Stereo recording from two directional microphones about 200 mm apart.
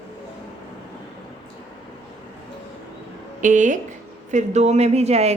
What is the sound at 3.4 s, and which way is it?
A woman's voice, 40° right (ahead or behind).